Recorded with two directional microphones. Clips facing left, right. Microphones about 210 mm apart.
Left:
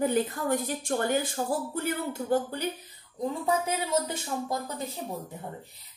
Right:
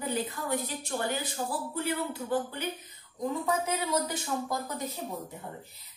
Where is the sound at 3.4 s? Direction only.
25° left (ahead or behind).